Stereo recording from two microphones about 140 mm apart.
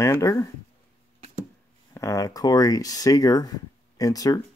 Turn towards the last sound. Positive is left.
turn(degrees=25)  # may be behind; listen again after turning